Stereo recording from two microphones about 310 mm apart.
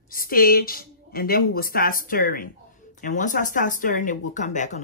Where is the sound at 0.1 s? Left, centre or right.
Left.